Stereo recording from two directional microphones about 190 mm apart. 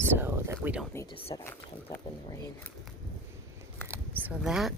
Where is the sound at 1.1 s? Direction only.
30° left (ahead or behind).